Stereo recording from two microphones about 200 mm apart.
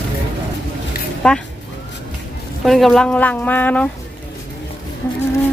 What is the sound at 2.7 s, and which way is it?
Speech, centre (ahead or behind).